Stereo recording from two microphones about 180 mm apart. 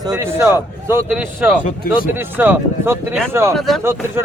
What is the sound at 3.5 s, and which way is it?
Speech, centre (ahead or behind).